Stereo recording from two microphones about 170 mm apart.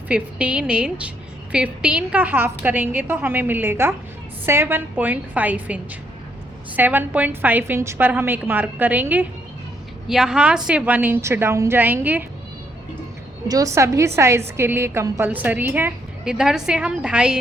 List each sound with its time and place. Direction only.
0.1 s a woman's voice: 5° right (ahead or behind)
13.5 s a woman's voice: 20° right (ahead or behind)